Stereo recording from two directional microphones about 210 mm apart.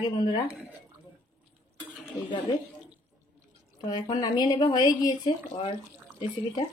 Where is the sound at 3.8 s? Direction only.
20° left (ahead or behind).